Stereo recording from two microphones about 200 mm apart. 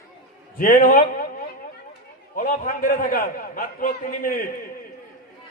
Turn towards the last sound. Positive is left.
turn(degrees=45)  # may be behind; listen again after turning